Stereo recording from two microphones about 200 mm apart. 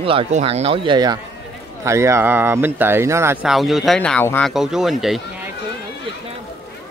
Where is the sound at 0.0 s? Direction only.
25° right (ahead or behind).